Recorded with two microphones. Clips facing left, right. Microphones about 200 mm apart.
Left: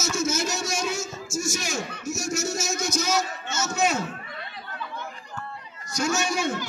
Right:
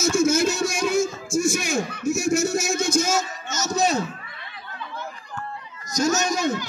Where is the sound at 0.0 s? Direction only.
55° right (ahead or behind).